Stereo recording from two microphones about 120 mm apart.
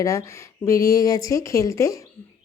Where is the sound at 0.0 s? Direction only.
25° left (ahead or behind).